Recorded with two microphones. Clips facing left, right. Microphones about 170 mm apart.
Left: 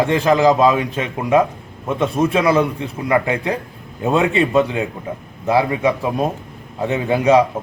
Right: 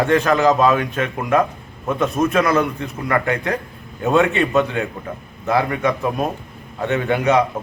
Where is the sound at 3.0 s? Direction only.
10° left (ahead or behind).